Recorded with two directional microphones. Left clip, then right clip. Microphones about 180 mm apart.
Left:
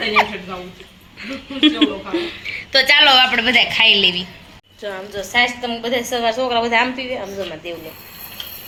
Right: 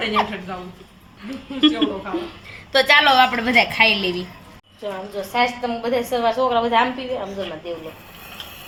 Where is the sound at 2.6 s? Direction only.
Centre (ahead or behind).